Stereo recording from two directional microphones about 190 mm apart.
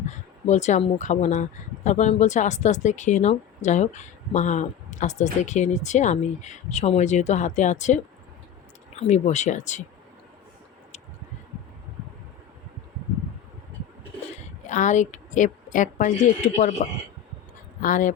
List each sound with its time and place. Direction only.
0.4 s speech: 40° left (ahead or behind)
14.7 s a woman's voice: 40° left (ahead or behind)